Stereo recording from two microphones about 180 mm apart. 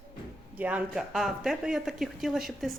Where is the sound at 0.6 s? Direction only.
10° right (ahead or behind).